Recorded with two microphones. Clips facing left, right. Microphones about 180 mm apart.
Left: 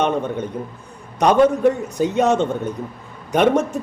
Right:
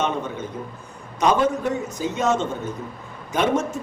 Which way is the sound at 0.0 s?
60° left (ahead or behind).